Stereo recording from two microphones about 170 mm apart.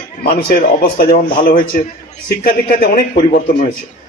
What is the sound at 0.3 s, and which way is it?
A man's voice, 65° left (ahead or behind).